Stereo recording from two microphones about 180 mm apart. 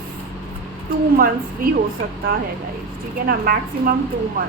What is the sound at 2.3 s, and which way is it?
A woman's voice, 50° right (ahead or behind).